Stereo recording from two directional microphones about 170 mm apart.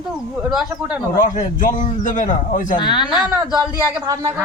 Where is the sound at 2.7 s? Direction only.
25° left (ahead or behind).